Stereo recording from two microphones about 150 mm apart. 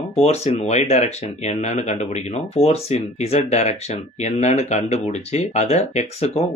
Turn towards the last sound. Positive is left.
turn(degrees=45)  # may be behind; listen again after turning